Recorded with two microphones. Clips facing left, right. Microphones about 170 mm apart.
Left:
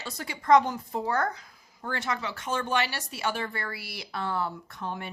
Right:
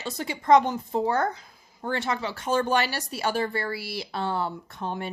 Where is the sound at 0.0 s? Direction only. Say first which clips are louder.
Right 5 dB; 25° right (ahead or behind).